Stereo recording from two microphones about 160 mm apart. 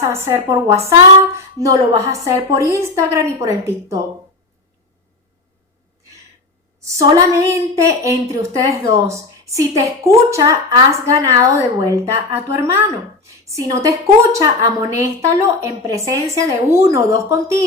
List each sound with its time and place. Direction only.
0.0 s a woman's voice: 15° right (ahead or behind)
6.8 s a woman's voice: 20° right (ahead or behind)